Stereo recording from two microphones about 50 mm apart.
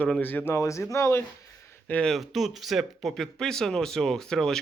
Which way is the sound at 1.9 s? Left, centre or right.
Left.